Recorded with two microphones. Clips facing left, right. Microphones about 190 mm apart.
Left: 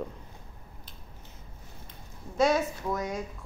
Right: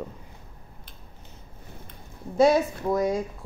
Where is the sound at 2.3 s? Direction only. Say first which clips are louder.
Right 5 dB; 30° right (ahead or behind).